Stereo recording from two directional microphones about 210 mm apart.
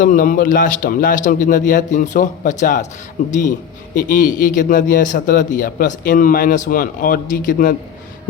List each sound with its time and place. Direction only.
0.0 s speech: 40° left (ahead or behind)
3.9 s speech: 40° left (ahead or behind)